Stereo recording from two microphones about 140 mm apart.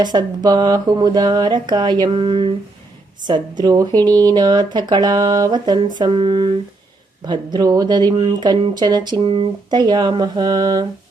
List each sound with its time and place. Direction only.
0.0 s speech: 30° right (ahead or behind)
3.6 s speech: 25° right (ahead or behind)